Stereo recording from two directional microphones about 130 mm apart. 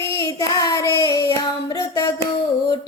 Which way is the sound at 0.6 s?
30° left (ahead or behind).